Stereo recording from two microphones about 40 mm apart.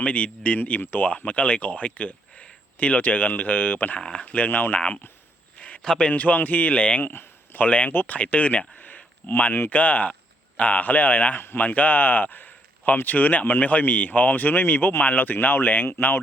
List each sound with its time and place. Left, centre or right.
0.0 s speech: left
0.8 s speech: left
1.1 s speech: left
3.9 s speech: left
4.3 s speech: left
5.5 s a sound: left
5.8 s a man's voice: centre
6.1 s speech: left
7.0 s a sound: left
7.9 s speech: left
9.5 s speech: left